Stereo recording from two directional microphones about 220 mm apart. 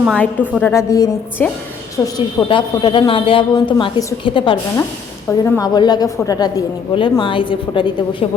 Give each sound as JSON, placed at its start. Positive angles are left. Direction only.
{"t": 0.0, "sound": "a woman's voice", "side_deg": 0}